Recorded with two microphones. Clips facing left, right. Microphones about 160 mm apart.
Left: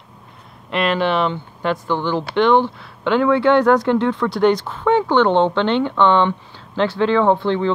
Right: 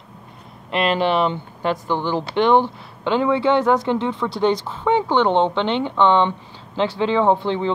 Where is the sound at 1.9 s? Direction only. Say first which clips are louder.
Left 1 dB; 10° right (ahead or behind).